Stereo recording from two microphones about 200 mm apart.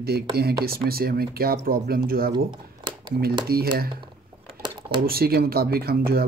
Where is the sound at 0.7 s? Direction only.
50° right (ahead or behind).